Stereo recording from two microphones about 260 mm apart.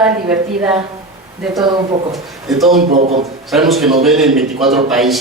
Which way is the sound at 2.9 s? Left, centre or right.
Right.